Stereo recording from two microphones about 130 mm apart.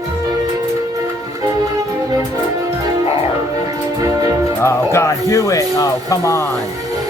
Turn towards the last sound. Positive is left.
turn(degrees=25)  # may be behind; listen again after turning